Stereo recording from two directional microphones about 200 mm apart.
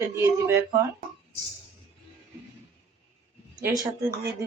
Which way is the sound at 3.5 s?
20° right (ahead or behind).